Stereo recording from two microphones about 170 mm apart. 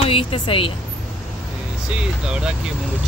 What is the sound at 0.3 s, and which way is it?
Speech, 30° left (ahead or behind).